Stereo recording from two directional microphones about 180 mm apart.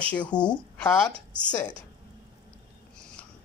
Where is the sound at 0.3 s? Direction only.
25° left (ahead or behind).